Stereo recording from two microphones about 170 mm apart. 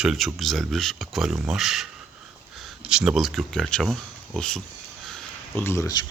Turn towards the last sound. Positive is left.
turn(degrees=20)  # may be behind; listen again after turning